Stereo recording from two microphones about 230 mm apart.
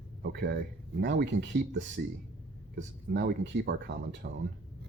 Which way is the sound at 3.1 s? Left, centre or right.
Right.